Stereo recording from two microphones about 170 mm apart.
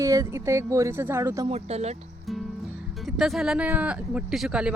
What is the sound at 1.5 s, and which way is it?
Speech, 40° right (ahead or behind).